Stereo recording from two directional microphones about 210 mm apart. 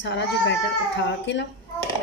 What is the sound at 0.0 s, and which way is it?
A woman's voice, 60° left (ahead or behind).